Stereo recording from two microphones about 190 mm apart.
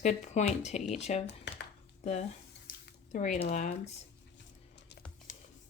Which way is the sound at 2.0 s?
35° left (ahead or behind).